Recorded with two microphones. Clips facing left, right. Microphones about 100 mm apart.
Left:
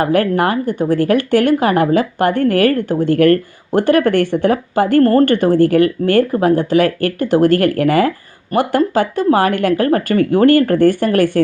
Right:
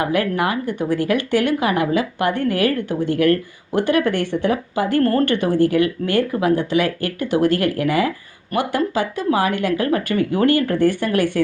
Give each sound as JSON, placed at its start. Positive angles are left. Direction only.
{"t": 0.0, "sound": "speech", "side_deg": 45}
{"t": 5.0, "sound": "speech", "side_deg": 40}